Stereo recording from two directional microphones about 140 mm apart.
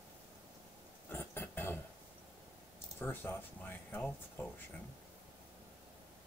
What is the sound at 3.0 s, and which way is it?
Speech, 15° left (ahead or behind).